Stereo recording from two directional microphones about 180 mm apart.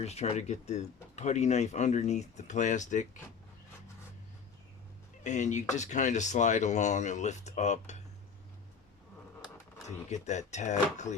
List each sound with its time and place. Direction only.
0.0 s speech: 35° left (ahead or behind)
5.2 s speech: 40° left (ahead or behind)
10.1 s speech: 40° left (ahead or behind)